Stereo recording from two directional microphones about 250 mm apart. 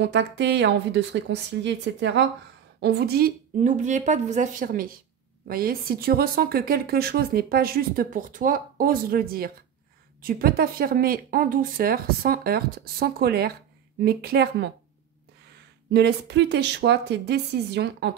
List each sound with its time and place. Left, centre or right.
0.0 s a woman's voice: right
15.9 s a woman's voice: right